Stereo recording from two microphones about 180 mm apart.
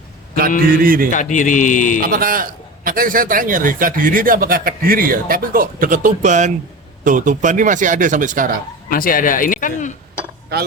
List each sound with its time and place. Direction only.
0.7 s a man's voice: 50° right (ahead or behind)
1.1 s speech: 45° left (ahead or behind)
2.0 s a man's voice: 50° right (ahead or behind)
8.9 s speech: 50° left (ahead or behind)